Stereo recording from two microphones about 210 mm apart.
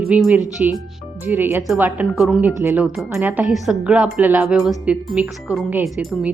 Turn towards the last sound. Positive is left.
turn(degrees=0)  # may be behind; listen again after turning